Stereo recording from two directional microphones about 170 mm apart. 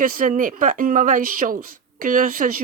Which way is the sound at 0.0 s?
55° right (ahead or behind).